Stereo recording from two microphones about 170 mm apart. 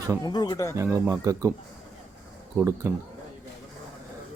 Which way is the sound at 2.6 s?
10° right (ahead or behind).